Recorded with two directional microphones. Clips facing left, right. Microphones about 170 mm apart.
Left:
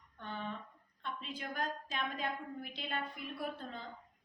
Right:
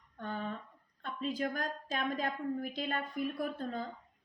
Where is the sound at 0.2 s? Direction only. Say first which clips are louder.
Right 4 dB; 45° right (ahead or behind).